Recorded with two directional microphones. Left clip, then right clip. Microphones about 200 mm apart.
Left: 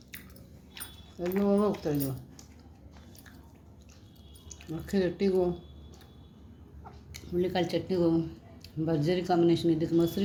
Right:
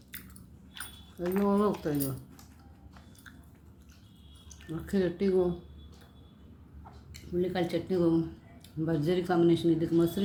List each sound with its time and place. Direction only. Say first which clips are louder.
0.8 s keys jangling: right 2 dB; 5° left (ahead or behind)
1.2 s speech: even; 15° right (ahead or behind)
1.5 s speech: left 1 dB; centre (ahead or behind)
4.4 s speech: left 1 dB; 5° left (ahead or behind)
7.1 s speech: left 2 dB; 15° left (ahead or behind)